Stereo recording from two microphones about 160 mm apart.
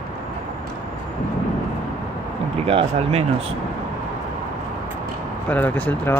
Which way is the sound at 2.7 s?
40° right (ahead or behind).